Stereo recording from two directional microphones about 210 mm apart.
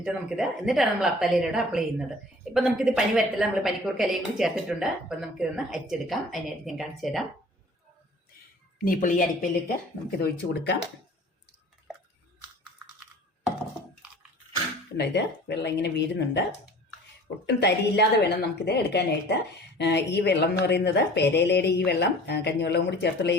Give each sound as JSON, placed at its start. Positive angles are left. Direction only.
{"t": 0.0, "sound": "a woman's voice", "side_deg": 0}
{"t": 8.8, "sound": "speech", "side_deg": 40}
{"t": 10.2, "sound": "speech", "side_deg": 50}
{"t": 14.9, "sound": "speech", "side_deg": 55}